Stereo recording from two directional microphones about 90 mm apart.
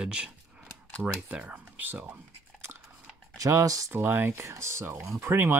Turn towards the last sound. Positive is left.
turn(degrees=-25)  # may be behind; listen again after turning